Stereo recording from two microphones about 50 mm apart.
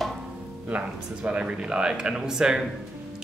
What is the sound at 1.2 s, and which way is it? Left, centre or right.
Speech, centre.